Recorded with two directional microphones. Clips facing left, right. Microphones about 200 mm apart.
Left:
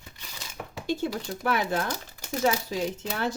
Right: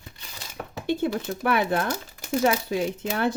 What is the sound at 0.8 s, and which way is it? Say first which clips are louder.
A woman's voice: right 4 dB; 60° right (ahead or behind).